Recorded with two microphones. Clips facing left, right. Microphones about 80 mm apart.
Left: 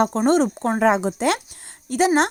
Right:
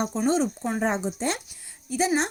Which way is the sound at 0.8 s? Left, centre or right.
Left.